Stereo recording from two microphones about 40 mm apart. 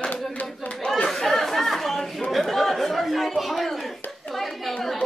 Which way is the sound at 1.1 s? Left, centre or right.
Centre.